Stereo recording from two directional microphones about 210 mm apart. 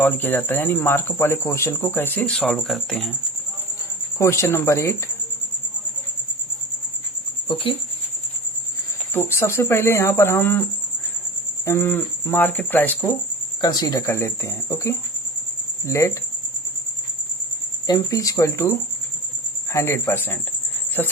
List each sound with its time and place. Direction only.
0.0 s speech: 10° left (ahead or behind)
4.2 s speech: 15° left (ahead or behind)
7.4 s speech: 25° left (ahead or behind)
9.1 s speech: 10° left (ahead or behind)
13.6 s speech: 20° left (ahead or behind)
17.8 s speech: 15° left (ahead or behind)